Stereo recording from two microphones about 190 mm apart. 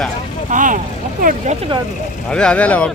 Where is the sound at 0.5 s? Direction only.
45° right (ahead or behind).